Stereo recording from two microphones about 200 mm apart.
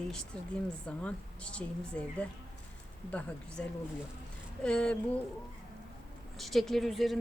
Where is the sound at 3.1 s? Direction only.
5° left (ahead or behind).